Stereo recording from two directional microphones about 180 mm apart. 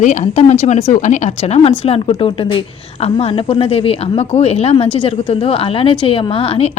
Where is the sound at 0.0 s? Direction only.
40° left (ahead or behind).